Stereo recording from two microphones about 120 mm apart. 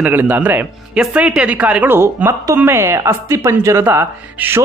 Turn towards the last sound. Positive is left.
turn(degrees=-20)  # may be behind; listen again after turning